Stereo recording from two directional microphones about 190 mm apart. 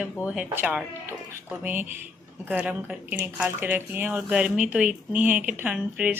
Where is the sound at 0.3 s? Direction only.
5° right (ahead or behind).